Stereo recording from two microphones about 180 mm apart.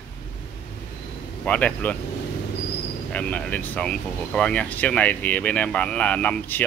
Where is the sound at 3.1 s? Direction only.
5° left (ahead or behind).